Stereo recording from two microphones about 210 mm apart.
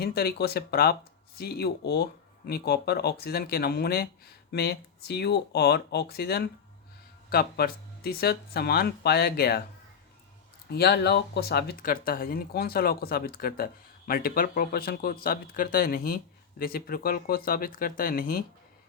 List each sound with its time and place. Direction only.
0.0 s speech: 50° left (ahead or behind)
10.7 s speech: 50° left (ahead or behind)